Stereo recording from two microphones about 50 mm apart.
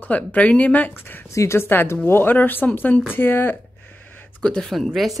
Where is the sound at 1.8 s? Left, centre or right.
Left.